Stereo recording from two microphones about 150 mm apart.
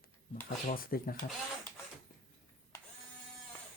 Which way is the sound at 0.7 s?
80° left.